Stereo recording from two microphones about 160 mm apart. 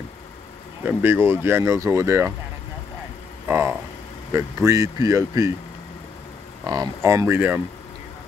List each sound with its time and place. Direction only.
0.8 s speech: 15° right (ahead or behind)
3.4 s a sound: 15° right (ahead or behind)
4.3 s speech: 20° right (ahead or behind)
6.6 s speech: 20° right (ahead or behind)